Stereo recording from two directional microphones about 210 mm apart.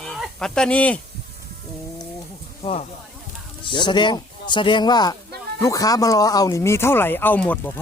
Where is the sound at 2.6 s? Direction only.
30° left (ahead or behind).